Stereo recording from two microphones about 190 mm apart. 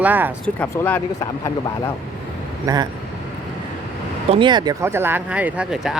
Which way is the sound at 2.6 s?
20° right (ahead or behind).